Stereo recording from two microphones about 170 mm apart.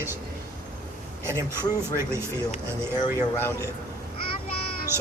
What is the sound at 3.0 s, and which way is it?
Speech, 15° left (ahead or behind).